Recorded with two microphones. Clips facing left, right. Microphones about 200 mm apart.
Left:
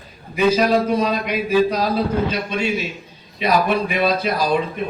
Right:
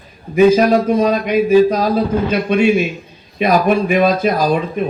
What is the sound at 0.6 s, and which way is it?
A man's voice, 45° right (ahead or behind).